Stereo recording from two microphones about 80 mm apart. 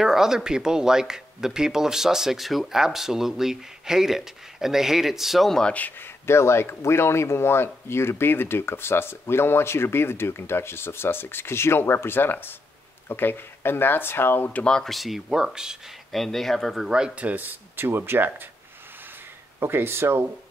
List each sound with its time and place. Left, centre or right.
0.0 s speech: centre
5.7 s speech: left; by 15.8 s centre
16.1 s speech: centre; by 18.3 s right
19.6 s speech: right